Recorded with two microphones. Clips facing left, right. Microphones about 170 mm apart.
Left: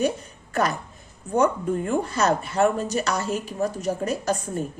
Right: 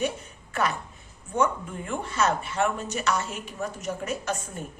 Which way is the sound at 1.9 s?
40° left (ahead or behind).